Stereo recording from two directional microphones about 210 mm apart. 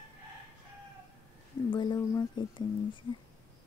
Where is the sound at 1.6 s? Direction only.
20° left (ahead or behind).